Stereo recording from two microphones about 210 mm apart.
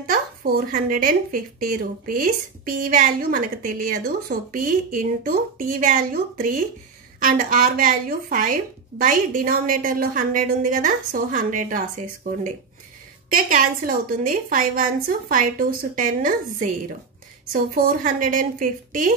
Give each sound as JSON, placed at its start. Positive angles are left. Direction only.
{"t": 0.0, "sound": "speech", "side_deg": -45}